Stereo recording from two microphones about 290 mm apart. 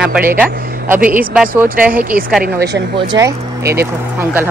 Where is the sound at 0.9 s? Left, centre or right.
Right.